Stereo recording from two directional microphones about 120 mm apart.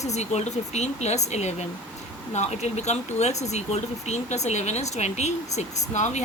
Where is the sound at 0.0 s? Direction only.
70° left (ahead or behind).